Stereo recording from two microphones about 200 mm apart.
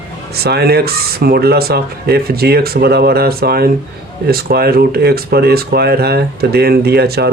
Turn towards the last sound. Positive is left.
turn(degrees=-55)  # may be behind; listen again after turning